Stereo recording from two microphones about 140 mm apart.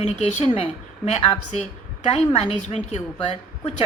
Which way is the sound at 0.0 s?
55° left (ahead or behind).